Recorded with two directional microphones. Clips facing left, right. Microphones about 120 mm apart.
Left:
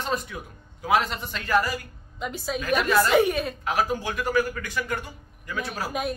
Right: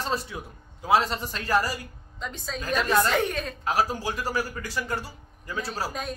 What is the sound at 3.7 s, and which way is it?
A man's voice, 35° right (ahead or behind).